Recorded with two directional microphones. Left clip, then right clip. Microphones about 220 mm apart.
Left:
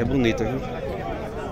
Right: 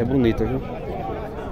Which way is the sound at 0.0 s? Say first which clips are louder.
Right 2 dB; 20° right (ahead or behind).